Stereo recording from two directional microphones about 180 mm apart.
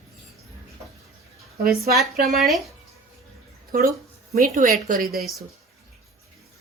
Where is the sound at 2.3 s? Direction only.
Centre (ahead or behind).